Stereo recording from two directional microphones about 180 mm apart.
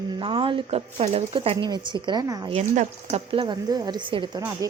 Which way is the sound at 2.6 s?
40° right (ahead or behind).